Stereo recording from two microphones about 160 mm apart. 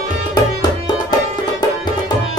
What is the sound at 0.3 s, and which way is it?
Music, 25° left (ahead or behind).